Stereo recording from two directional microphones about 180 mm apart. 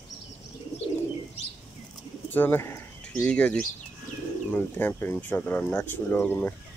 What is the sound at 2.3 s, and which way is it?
Speech, 10° left (ahead or behind).